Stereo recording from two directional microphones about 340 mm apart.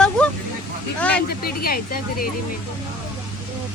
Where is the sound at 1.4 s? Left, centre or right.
Left.